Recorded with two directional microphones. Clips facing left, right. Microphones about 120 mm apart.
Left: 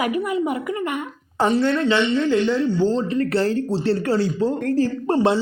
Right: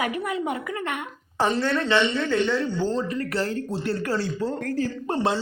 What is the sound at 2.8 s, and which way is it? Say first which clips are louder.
Speech: left 6 dB; 25° left (ahead or behind).